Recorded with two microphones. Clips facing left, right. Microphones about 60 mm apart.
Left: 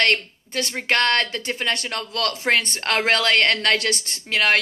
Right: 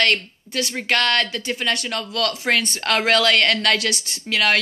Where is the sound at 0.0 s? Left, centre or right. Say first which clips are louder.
Even; left.